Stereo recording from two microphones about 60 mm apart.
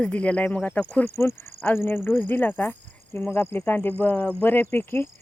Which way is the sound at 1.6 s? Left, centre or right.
Left.